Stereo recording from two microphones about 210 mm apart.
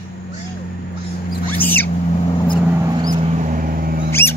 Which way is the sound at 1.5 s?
10° left (ahead or behind).